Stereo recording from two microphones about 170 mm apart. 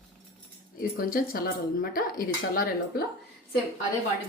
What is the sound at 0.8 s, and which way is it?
Speech, 55° left (ahead or behind).